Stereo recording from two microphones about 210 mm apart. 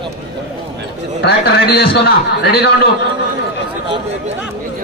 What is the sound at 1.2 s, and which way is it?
A man's voice, 50° left (ahead or behind).